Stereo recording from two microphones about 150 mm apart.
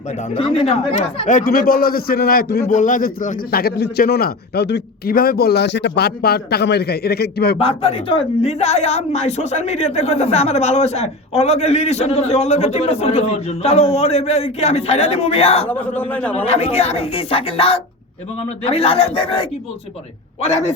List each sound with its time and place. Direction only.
0.3 s a man's voice: 40° left (ahead or behind)
1.3 s a man's voice: 70° left (ahead or behind); by 2.6 s 85° left
2.6 s a man's voice: 55° left (ahead or behind); by 7.6 s 90° left
7.6 s a woman's voice: 40° left (ahead or behind)
15.7 s speech: 10° left (ahead or behind)
16.3 s a woman's voice: 45° left (ahead or behind)